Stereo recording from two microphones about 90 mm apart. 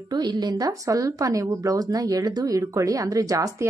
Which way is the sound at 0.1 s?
50° right (ahead or behind).